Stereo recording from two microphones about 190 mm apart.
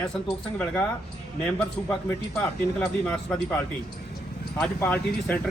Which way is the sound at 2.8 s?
5° left (ahead or behind).